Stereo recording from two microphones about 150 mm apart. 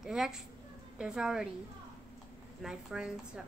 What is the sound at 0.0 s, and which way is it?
A child's voice, 5° right (ahead or behind).